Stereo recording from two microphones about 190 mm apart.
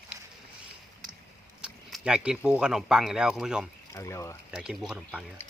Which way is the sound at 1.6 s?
5° right (ahead or behind).